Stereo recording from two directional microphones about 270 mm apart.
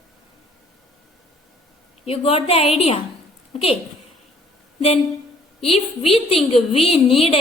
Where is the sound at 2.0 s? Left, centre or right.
Left.